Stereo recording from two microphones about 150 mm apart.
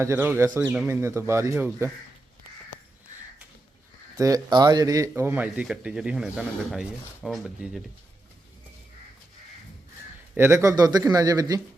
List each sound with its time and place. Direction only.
0.0 s speech: 15° right (ahead or behind)
4.2 s speech: 25° right (ahead or behind); by 7.8 s centre (ahead or behind)
10.3 s speech: 15° right (ahead or behind)